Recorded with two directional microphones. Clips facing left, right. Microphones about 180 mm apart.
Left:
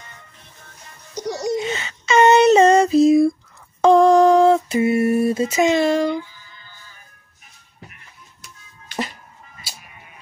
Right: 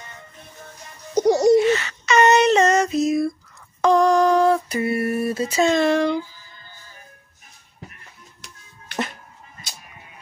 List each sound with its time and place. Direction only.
1.1 s music: 50° right (ahead or behind)
1.7 s female singing: 25° left (ahead or behind)
3.8 s a sound: 25° left (ahead or behind)
5.6 s speech: 10° left (ahead or behind)
8.9 s music: 65° right (ahead or behind)